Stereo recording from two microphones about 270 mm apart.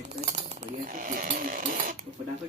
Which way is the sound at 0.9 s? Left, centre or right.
Right.